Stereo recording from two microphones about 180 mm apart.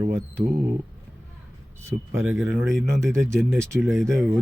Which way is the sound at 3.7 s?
Centre (ahead or behind).